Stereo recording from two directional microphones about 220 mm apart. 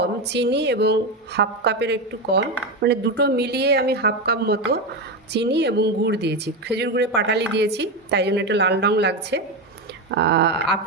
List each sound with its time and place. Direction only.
0.0 s speech: 50° right (ahead or behind)